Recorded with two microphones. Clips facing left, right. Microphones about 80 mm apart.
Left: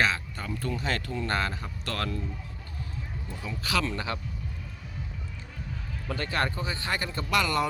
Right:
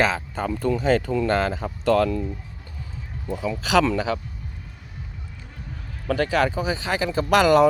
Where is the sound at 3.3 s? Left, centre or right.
Right.